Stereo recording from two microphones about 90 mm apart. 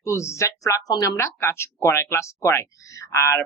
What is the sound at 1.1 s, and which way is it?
Speech, 25° left (ahead or behind).